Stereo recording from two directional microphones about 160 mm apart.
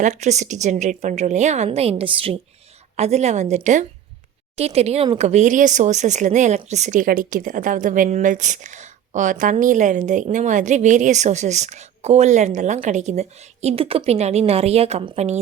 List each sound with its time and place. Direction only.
0.0 s a woman's voice: 45° right (ahead or behind)